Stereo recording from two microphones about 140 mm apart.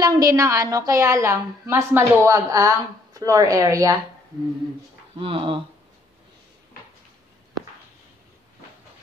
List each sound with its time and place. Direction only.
0.0 s a woman's voice: 25° right (ahead or behind)
5.2 s speech: 40° right (ahead or behind)